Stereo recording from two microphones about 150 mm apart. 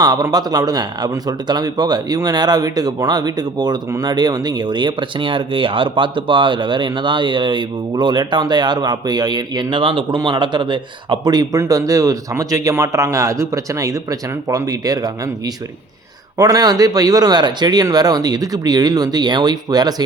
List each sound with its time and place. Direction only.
0.0 s speech: 25° right (ahead or behind)